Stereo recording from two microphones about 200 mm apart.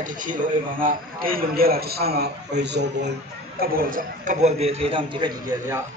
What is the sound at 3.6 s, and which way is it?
A man's voice, 45° right (ahead or behind).